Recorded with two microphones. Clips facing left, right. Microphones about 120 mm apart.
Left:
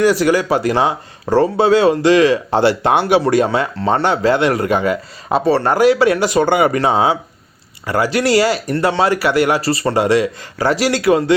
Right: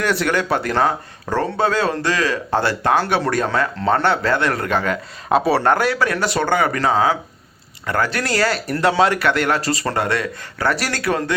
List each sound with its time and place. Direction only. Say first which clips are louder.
0.0 s a man's voice: left 6 dB; 5° left (ahead or behind)
5.8 s a man's voice: left 7 dB; 20° left (ahead or behind)
7.9 s a man's voice: left 6 dB; 10° left (ahead or behind)
8.7 s a man's voice: right 2 dB; centre (ahead or behind); by 11.3 s 15° left (ahead or behind)